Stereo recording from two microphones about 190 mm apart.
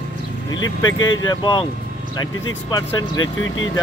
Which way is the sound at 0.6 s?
90° left.